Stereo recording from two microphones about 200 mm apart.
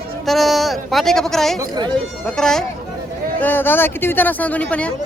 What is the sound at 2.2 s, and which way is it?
A man's voice, centre (ahead or behind).